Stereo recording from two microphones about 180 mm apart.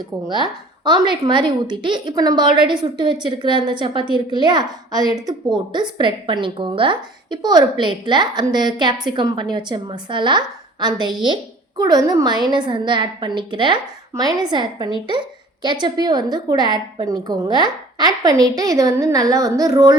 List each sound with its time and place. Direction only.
0.3 s speech: 25° right (ahead or behind)